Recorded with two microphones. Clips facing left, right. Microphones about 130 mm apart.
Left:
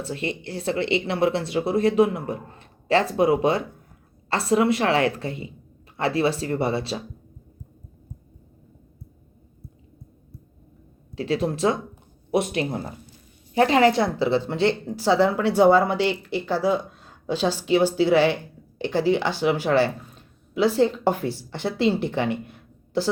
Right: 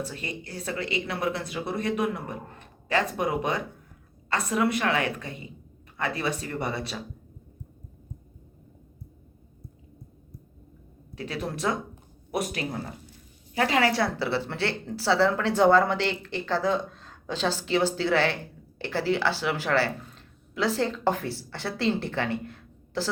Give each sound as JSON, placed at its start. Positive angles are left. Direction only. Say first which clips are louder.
{"t": 0.0, "sound": "a woman's voice", "louder": "left 6 dB", "side_deg": 30}
{"t": 11.2, "sound": "a woman's voice", "louder": "left 8 dB", "side_deg": 25}